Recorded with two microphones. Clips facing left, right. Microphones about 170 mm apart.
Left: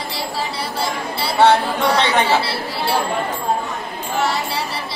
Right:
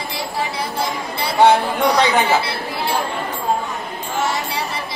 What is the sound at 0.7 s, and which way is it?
Chatter, 20° right (ahead or behind).